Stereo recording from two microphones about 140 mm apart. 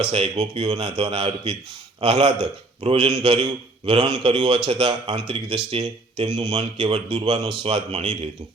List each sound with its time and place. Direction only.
0.0 s a man's voice: 45° right (ahead or behind)